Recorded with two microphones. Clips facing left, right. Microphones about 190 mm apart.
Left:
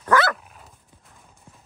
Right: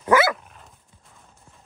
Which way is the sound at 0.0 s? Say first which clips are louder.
Right 2 dB; 10° right (ahead or behind).